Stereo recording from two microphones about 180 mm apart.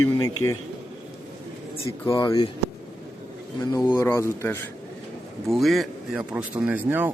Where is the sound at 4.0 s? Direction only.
15° left (ahead or behind).